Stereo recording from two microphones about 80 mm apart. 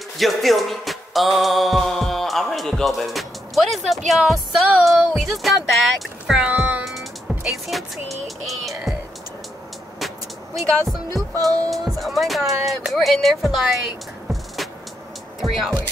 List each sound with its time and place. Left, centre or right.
0.2 s music: centre
6.3 s music: centre
6.8 s music: centre
9.9 s vehicle: centre
11.3 s music: right
11.7 s music: centre
15.4 s speech: centre